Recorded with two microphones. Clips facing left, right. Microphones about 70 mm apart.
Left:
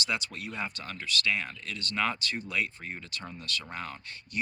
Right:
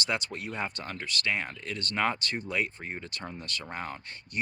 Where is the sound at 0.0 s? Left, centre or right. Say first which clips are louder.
Right 1 dB; right.